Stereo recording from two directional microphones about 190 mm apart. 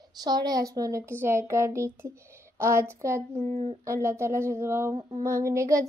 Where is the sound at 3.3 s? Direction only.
35° right (ahead or behind).